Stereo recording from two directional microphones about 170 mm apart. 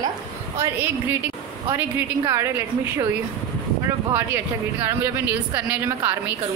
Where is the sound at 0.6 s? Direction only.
10° right (ahead or behind).